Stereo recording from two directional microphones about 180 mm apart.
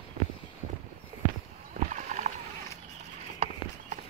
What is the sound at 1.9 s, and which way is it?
Insect, 40° right (ahead or behind).